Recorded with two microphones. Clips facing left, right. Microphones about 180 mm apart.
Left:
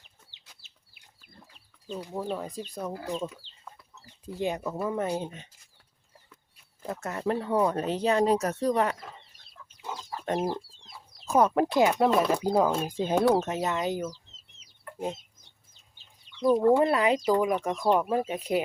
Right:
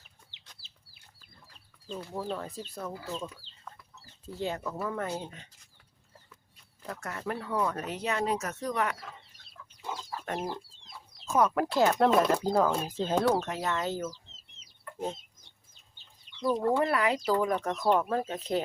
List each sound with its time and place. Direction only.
0.6 s chicken: 25° left (ahead or behind)
2.0 s speech: 15° left (ahead or behind)
6.8 s speech: 25° left (ahead or behind)
10.2 s speech: 30° left (ahead or behind); by 11.9 s 15° left (ahead or behind)
11.9 s speech: 5° left (ahead or behind)
16.4 s speech: 15° left (ahead or behind)